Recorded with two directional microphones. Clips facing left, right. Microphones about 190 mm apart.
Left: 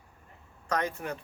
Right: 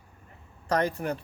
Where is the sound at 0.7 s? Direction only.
35° right (ahead or behind).